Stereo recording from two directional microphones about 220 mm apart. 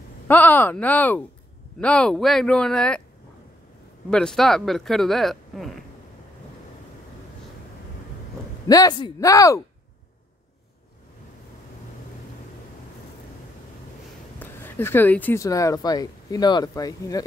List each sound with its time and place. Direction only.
0.3 s speech: 10° left (ahead or behind)
4.1 s speech: centre (ahead or behind)
8.6 s speech: 15° left (ahead or behind)
14.4 s speech: 10° left (ahead or behind)